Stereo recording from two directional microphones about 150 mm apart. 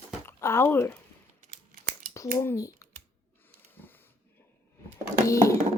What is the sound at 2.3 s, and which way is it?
Speech, 20° left (ahead or behind).